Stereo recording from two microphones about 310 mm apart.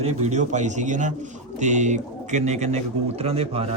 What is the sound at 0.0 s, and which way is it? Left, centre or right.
Speech, right.